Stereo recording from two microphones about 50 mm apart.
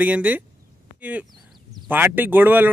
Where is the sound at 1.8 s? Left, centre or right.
Right.